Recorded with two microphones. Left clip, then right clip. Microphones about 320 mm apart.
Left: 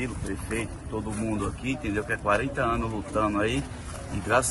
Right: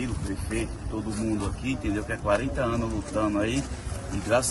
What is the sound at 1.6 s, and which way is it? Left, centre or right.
Speech, centre.